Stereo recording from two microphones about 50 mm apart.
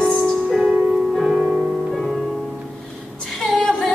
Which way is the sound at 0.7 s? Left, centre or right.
Right.